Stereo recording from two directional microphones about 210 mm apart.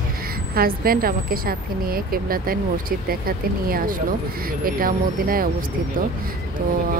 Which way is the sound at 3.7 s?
45° right (ahead or behind).